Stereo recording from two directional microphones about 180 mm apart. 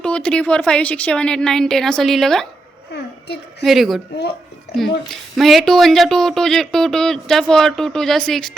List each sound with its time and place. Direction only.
0.0 s speech: 5° left (ahead or behind)
3.6 s speech: centre (ahead or behind)
5.3 s speech: centre (ahead or behind)